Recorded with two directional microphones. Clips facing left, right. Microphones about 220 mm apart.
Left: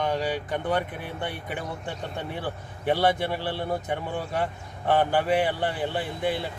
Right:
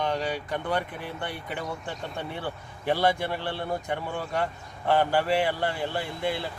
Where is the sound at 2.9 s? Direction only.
20° left (ahead or behind).